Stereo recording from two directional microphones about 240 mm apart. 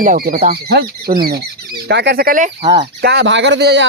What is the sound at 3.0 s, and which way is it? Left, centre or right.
Speech, right.